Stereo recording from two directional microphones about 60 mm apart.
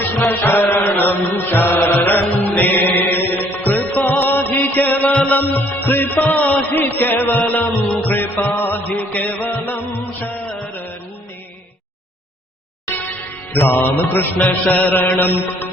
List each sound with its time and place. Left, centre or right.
0.3 s mantra: left
2.4 s music: left
13.5 s mantra: left